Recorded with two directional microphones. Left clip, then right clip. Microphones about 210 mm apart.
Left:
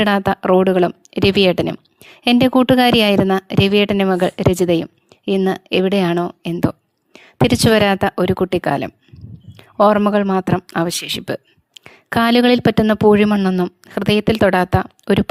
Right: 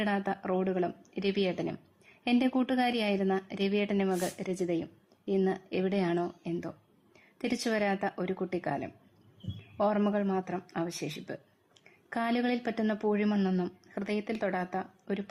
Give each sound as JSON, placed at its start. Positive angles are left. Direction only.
{"t": 0.0, "sound": "a woman's voice", "side_deg": 45}